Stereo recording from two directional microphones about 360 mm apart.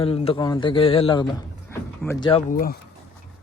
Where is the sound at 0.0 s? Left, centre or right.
Centre.